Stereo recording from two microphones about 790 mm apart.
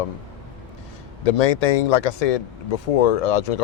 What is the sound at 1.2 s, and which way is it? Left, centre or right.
Speech, left.